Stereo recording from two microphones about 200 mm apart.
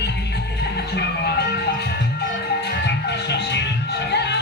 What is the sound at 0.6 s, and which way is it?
Music, 55° left (ahead or behind).